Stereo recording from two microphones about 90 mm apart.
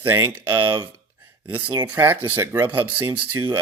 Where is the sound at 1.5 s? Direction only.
25° right (ahead or behind).